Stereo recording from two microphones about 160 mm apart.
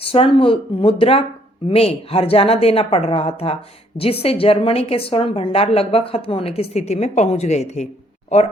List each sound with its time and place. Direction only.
0.0 s a woman's voice: 35° left (ahead or behind)